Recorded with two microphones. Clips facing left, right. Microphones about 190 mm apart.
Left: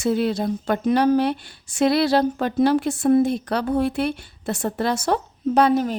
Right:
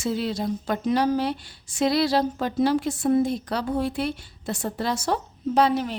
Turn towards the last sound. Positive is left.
turn(degrees=45)  # may be behind; listen again after turning